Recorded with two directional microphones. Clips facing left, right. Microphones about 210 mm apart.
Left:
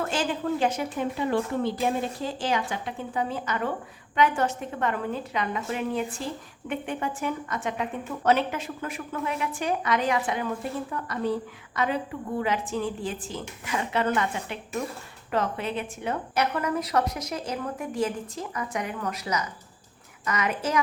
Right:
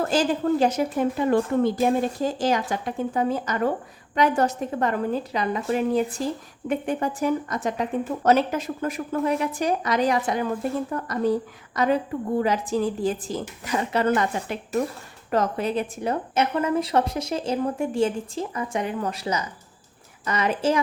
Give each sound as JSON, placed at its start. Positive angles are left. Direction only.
{"t": 0.0, "sound": "speech", "side_deg": -40}
{"t": 16.3, "sound": "a woman's voice", "side_deg": -25}